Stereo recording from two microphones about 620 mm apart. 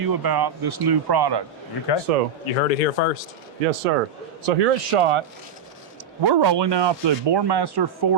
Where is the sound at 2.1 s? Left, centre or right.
Right.